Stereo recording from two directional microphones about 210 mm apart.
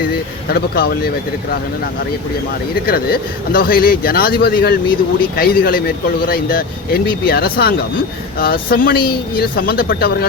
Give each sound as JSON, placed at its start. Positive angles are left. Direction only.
{"t": 0.5, "sound": "speech", "side_deg": 45}
{"t": 2.8, "sound": "speech", "side_deg": 45}